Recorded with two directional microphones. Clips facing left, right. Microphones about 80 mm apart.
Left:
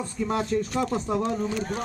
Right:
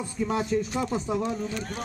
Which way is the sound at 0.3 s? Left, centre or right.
Centre.